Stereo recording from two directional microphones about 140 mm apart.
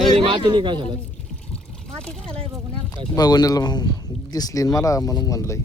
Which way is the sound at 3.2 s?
30° left (ahead or behind).